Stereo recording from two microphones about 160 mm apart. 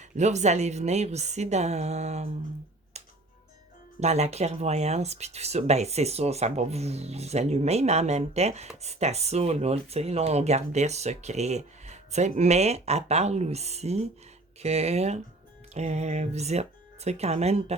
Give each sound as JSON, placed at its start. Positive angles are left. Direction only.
{"t": 0.0, "sound": "speech", "side_deg": -45}
{"t": 4.0, "sound": "speech", "side_deg": -45}